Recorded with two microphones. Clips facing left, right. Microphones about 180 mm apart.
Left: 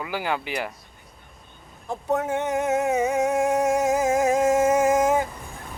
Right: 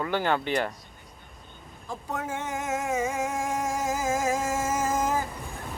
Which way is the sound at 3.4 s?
70° left (ahead or behind).